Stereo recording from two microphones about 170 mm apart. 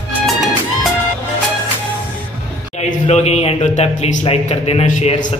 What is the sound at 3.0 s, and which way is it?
Speech, 40° left (ahead or behind).